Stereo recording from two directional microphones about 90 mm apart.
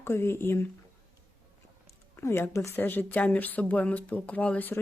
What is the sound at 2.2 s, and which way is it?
Speech, 25° left (ahead or behind).